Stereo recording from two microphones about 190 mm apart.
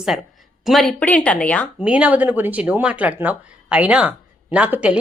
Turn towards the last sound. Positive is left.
turn(degrees=-10)  # may be behind; listen again after turning